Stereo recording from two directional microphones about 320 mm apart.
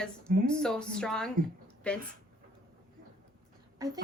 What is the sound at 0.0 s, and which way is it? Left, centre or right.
A woman's voice, centre.